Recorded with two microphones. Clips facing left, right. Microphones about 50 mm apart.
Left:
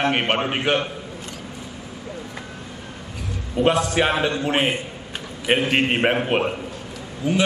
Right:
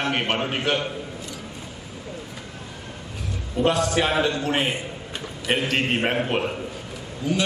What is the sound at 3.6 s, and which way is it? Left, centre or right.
A man's voice, left.